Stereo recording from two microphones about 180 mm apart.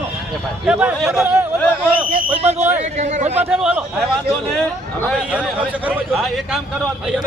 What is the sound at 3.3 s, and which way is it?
Speech, 5° right (ahead or behind).